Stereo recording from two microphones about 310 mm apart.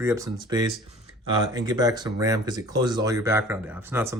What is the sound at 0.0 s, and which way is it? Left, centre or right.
Speech, centre.